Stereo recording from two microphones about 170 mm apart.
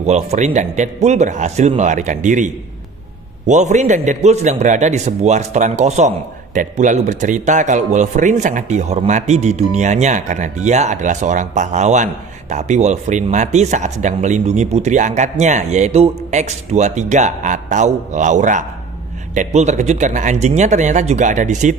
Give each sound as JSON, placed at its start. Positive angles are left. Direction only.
{"t": 0.0, "sound": "speech", "side_deg": -40}